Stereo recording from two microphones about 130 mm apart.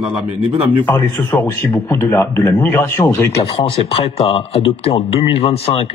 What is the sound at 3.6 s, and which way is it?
A man's voice, 50° left (ahead or behind).